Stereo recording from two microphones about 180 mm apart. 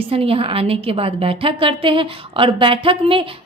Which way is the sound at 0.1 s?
30° right (ahead or behind).